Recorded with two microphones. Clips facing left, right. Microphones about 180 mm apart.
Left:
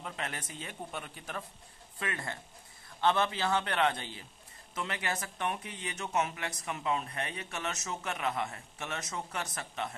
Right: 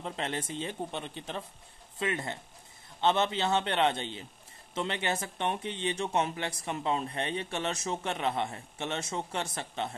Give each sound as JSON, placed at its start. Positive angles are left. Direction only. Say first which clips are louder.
{"t": 0.0, "sound": "speech", "louder": "right 5 dB", "side_deg": -30}